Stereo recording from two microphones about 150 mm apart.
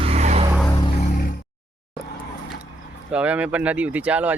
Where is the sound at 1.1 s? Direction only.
70° left (ahead or behind).